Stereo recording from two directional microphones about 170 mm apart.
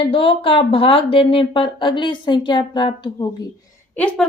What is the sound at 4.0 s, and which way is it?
Speech, 10° left (ahead or behind).